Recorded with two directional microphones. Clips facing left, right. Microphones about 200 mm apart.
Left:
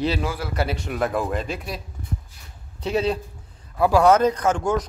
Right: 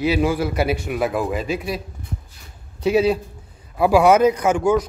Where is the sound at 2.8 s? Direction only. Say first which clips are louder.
Right 6 dB; 5° right (ahead or behind).